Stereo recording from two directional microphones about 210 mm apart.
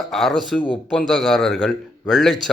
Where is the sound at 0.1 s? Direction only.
Centre (ahead or behind).